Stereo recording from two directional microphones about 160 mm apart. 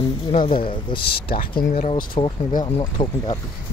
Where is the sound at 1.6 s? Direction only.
55° left (ahead or behind).